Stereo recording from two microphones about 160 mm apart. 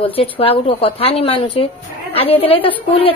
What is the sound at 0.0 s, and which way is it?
A woman's voice, 35° left (ahead or behind).